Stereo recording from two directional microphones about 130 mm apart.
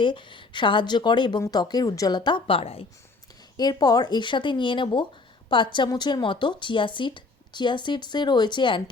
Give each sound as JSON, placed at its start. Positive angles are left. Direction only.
{"t": 0.0, "sound": "a woman's voice", "side_deg": 40}
{"t": 3.6, "sound": "a woman's voice", "side_deg": 30}